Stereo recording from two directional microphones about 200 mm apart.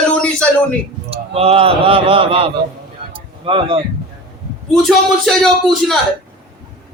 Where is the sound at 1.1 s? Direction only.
30° right (ahead or behind).